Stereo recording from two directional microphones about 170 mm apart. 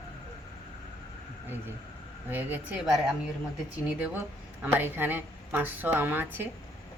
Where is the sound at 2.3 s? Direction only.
10° right (ahead or behind).